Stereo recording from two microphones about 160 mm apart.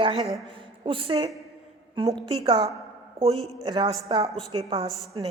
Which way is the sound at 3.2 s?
40° right (ahead or behind).